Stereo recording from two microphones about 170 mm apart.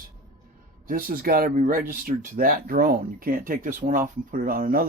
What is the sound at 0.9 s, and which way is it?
Speech, 55° right (ahead or behind).